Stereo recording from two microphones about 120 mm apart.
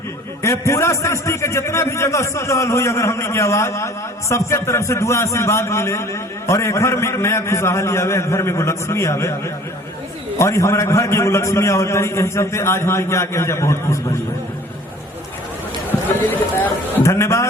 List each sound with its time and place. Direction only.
0.4 s a man's voice: 25° left (ahead or behind)
10.3 s a man's voice: 25° left (ahead or behind)
15.9 s run: 15° left (ahead or behind)
16.9 s a man's voice: 25° left (ahead or behind)